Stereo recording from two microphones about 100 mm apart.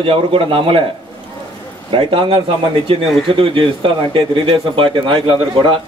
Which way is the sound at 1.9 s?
60° right (ahead or behind).